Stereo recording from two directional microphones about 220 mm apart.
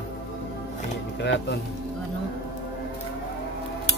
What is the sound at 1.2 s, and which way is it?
Speech, 50° left (ahead or behind).